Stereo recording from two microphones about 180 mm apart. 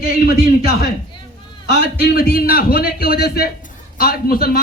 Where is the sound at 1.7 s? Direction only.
60° left (ahead or behind).